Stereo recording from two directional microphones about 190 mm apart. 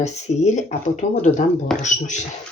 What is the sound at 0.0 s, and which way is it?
Speech, 40° left (ahead or behind).